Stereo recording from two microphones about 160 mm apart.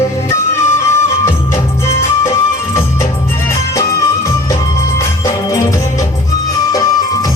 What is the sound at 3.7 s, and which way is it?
Music, 20° left (ahead or behind).